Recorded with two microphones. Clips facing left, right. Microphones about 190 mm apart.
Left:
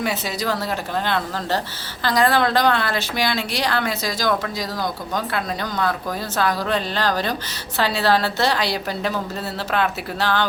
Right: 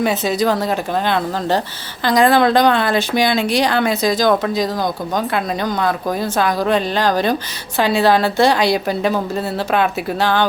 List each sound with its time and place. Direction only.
0.0 s a woman's voice: 20° right (ahead or behind)